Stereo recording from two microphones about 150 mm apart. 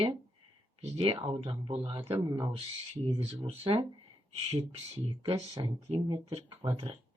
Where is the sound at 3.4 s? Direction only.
40° right (ahead or behind).